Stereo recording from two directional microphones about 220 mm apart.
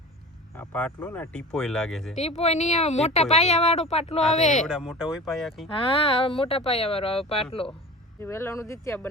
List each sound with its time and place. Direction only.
0.5 s speech: 10° left (ahead or behind)
2.1 s a woman's voice: 30° left (ahead or behind)
4.6 s speech: centre (ahead or behind)
5.9 s speech: 25° left (ahead or behind)
8.2 s speech: 10° left (ahead or behind)